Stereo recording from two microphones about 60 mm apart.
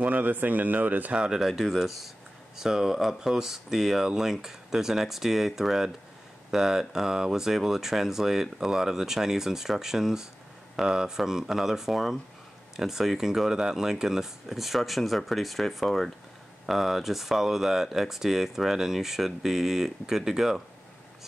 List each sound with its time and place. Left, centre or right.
0.0 s speech: right
1.1 s speech: centre